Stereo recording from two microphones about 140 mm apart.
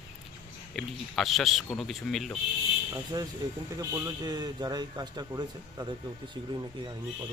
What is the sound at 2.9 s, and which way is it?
A man's voice, 25° right (ahead or behind).